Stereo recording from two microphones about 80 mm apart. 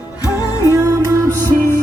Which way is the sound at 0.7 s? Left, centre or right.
Right.